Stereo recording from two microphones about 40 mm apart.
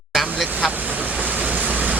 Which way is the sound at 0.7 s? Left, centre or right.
Right.